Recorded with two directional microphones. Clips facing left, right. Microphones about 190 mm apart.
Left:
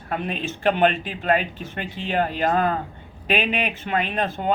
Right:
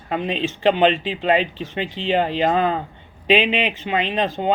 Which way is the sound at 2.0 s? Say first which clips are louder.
Right 3 dB; 20° right (ahead or behind).